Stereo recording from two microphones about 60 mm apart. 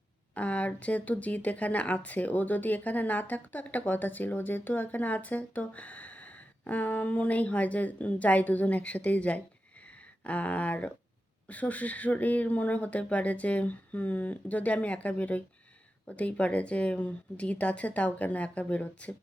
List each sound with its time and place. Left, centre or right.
0.3 s speech: left